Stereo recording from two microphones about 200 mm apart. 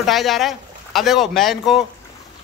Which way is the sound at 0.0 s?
Centre (ahead or behind).